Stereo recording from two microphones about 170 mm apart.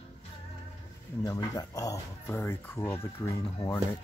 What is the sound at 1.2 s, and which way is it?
Speech, 20° left (ahead or behind).